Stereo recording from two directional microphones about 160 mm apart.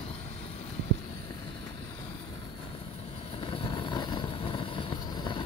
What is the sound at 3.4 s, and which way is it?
Vehicle, 30° left (ahead or behind).